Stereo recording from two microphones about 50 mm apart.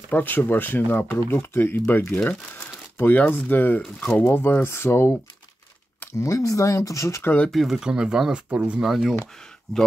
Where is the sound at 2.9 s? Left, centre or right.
Left.